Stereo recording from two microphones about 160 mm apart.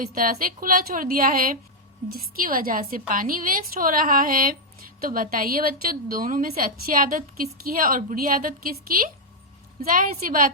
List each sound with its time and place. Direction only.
0.1 s a woman's voice: 60° right (ahead or behind)